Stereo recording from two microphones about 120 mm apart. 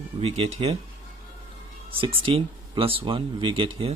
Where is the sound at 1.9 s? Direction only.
50° right (ahead or behind).